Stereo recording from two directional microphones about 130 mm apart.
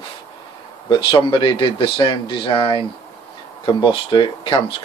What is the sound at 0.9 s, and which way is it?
Speech, 40° left (ahead or behind).